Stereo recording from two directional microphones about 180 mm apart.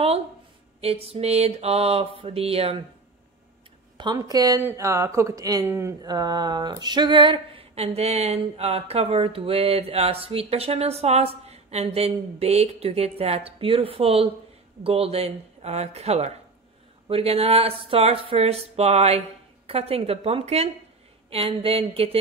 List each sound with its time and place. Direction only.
0.7 s speech: 35° right (ahead or behind)
4.0 s speech: 20° right (ahead or behind)